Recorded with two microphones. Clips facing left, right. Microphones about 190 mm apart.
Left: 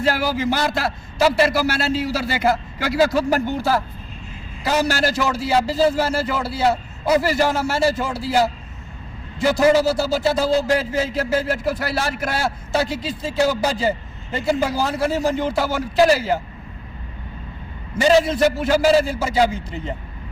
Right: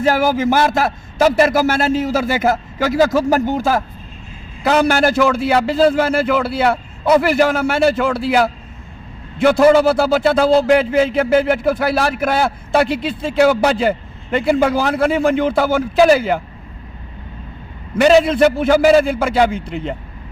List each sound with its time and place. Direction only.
0.0 s a man's voice: 50° right (ahead or behind)
4.6 s a man's voice: 60° right (ahead or behind)
17.9 s a man's voice: 60° right (ahead or behind)